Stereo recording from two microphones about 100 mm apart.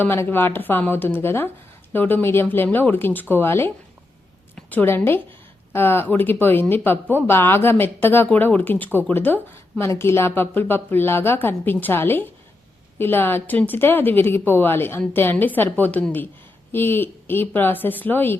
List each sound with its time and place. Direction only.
0.0 s a woman's voice: 20° left (ahead or behind)